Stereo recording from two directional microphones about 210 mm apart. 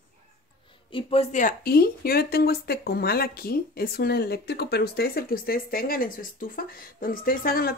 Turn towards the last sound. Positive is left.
turn(degrees=45)  # may be behind; listen again after turning